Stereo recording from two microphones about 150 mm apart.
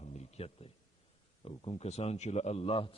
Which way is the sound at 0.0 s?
45° left (ahead or behind).